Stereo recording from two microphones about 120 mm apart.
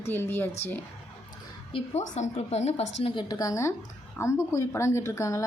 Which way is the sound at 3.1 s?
35° left (ahead or behind).